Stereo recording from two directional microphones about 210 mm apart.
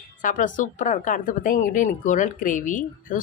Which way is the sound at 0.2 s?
40° left (ahead or behind).